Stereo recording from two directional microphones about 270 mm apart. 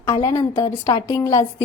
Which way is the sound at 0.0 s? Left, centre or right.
Centre.